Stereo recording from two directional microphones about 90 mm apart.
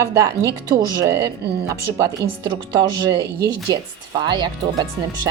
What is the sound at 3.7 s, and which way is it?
Speech, 45° right (ahead or behind).